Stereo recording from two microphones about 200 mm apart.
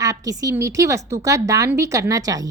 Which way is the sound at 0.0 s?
15° right (ahead or behind).